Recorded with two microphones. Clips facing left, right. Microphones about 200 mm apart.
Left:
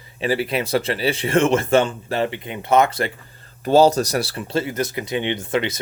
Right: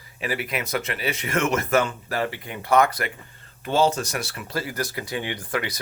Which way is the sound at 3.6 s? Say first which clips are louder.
Left 7 dB; 40° left (ahead or behind).